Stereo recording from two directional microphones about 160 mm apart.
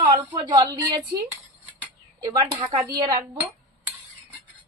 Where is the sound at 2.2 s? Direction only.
20° right (ahead or behind).